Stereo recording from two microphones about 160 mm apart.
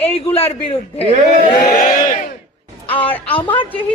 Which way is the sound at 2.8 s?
35° left (ahead or behind).